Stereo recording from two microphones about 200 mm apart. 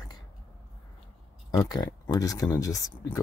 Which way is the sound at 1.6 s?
15° left (ahead or behind).